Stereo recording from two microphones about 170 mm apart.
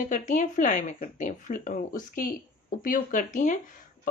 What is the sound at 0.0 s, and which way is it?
Speech, 50° left (ahead or behind).